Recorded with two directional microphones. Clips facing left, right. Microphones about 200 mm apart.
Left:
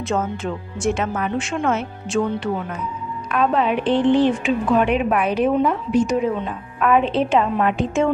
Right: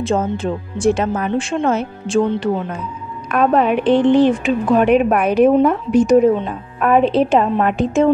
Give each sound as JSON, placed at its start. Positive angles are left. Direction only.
{"t": 0.0, "sound": "speech", "side_deg": -30}
{"t": 3.3, "sound": "a woman's voice", "side_deg": -50}